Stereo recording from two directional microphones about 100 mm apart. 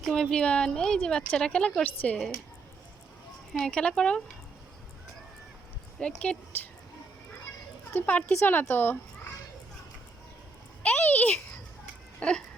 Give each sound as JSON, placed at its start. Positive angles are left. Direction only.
{"t": 0.0, "sound": "a woman's voice", "side_deg": 5}
{"t": 3.6, "sound": "a woman's voice", "side_deg": 10}
{"t": 6.0, "sound": "a woman's voice", "side_deg": 10}
{"t": 7.9, "sound": "speech", "side_deg": 20}
{"t": 10.8, "sound": "a woman's voice", "side_deg": 15}